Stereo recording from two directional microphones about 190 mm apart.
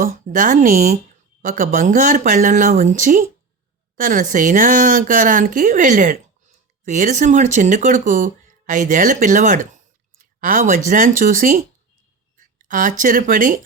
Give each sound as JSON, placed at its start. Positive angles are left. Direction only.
{"t": 0.0, "sound": "a woman's voice", "side_deg": -45}